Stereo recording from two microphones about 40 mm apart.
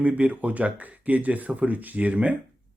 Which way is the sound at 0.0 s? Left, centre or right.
Right.